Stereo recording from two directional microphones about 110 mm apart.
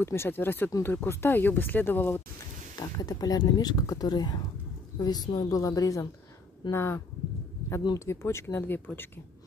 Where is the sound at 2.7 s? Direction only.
40° left (ahead or behind).